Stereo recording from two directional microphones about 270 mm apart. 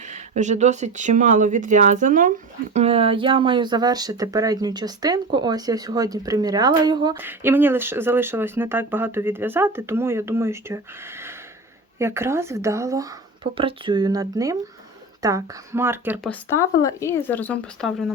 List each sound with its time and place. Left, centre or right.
0.0 s speech: right; by 16.3 s centre
16.3 s speech: centre